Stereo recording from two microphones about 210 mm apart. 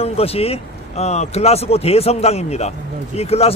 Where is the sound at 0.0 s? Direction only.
30° left (ahead or behind).